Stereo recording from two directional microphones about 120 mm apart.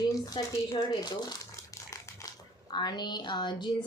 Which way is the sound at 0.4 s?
45° left (ahead or behind).